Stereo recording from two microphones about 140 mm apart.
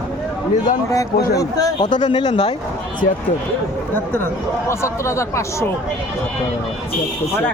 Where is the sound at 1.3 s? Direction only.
25° left (ahead or behind).